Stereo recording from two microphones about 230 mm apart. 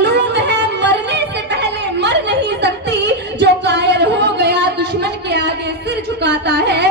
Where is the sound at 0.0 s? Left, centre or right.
Right.